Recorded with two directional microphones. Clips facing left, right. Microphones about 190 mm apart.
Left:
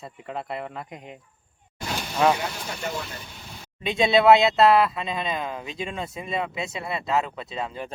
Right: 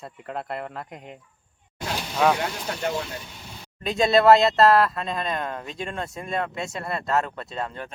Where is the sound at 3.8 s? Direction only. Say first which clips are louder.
Right 1 dB; centre (ahead or behind).